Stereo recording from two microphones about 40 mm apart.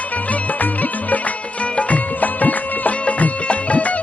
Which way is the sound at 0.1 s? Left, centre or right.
Left.